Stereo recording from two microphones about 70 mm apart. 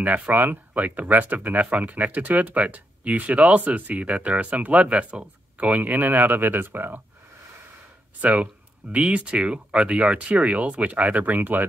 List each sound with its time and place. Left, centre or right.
0.0 s speech: right
8.2 s speech: centre